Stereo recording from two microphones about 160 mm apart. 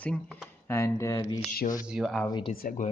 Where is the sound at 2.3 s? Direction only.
30° left (ahead or behind).